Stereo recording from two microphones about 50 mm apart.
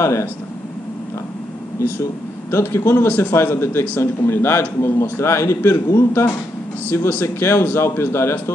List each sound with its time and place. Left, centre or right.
0.0 s speech: left
2.6 s a man's voice: left
7.1 s speech: left
7.4 s a man's voice: left